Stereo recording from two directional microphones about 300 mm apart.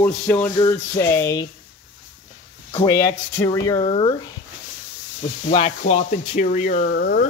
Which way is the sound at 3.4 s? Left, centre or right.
Centre.